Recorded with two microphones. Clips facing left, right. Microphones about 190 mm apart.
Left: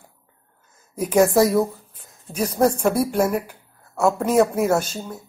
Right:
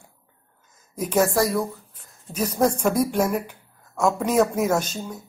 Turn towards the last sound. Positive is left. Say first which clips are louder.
# left 2 dB
turn(degrees=10)  # may be behind; listen again after turning